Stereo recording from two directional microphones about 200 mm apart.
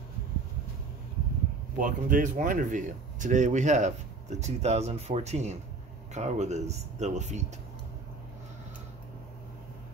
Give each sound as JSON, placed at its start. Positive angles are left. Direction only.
{"t": 1.8, "sound": "speech", "side_deg": -45}